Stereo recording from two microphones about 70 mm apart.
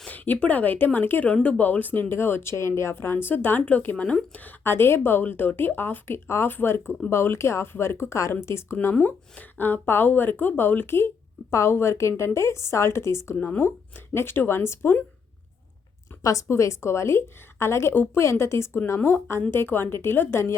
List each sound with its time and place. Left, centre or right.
0.1 s a woman's voice: left
13.3 s speech: left
16.2 s speech: left
16.5 s speech: left
17.9 s a woman's voice: left
18.2 s speech: left